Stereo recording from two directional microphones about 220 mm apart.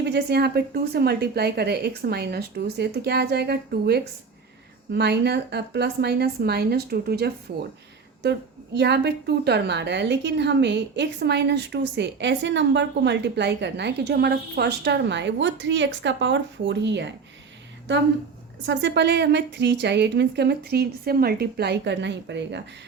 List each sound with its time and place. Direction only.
0.0 s a woman's voice: 50° right (ahead or behind)
18.6 s a woman's voice: 55° right (ahead or behind)